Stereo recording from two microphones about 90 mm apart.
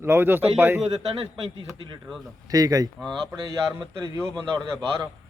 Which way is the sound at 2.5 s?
45° right (ahead or behind).